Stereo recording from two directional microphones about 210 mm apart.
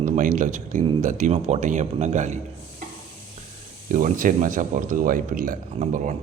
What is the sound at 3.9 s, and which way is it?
Speech, 40° right (ahead or behind).